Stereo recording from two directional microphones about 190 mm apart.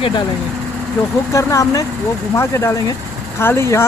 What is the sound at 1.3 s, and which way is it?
Speech, 15° left (ahead or behind).